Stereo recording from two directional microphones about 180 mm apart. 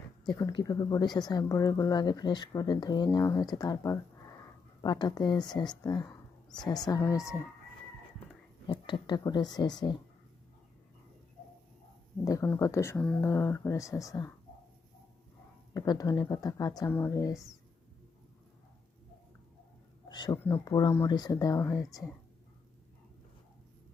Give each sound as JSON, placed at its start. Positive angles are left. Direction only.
{"t": 0.3, "sound": "speech", "side_deg": 20}
{"t": 8.6, "sound": "speech", "side_deg": 25}
{"t": 12.2, "sound": "speech", "side_deg": 15}
{"t": 15.7, "sound": "speech", "side_deg": 20}
{"t": 20.1, "sound": "speech", "side_deg": 25}